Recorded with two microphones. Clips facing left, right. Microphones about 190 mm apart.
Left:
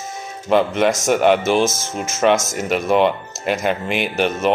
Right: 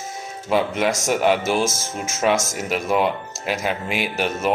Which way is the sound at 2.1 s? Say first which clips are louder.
Left 4 dB; 5° right (ahead or behind).